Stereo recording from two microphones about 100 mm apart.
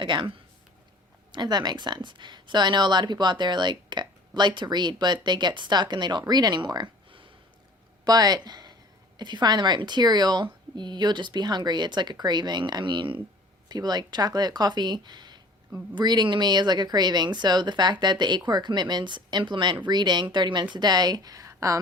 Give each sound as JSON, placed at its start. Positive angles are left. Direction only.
{"t": 0.0, "sound": "speech", "side_deg": -55}
{"t": 13.7, "sound": "speech", "side_deg": -45}